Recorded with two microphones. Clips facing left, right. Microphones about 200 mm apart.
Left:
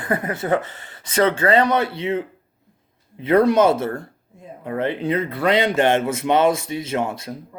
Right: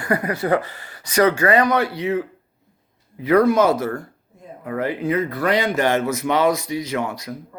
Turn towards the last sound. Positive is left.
turn(degrees=25)  # may be behind; listen again after turning